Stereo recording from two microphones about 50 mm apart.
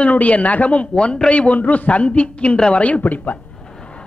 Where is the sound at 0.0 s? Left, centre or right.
Left.